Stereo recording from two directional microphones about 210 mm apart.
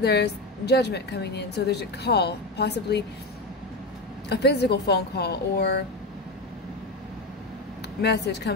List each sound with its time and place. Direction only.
0.0 s a woman's voice: 50° left (ahead or behind)
4.3 s a woman's voice: 50° left (ahead or behind)
8.0 s a woman's voice: 50° left (ahead or behind)